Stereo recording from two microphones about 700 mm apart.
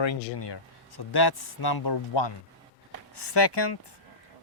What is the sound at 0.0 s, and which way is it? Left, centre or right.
A man's voice, left.